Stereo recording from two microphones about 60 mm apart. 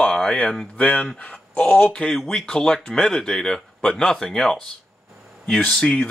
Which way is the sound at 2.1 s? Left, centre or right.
Centre.